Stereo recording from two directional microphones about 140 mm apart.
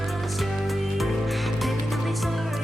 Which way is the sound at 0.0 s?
Centre (ahead or behind).